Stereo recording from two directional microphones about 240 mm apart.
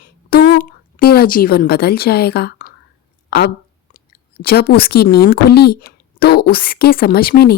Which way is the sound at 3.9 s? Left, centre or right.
Left.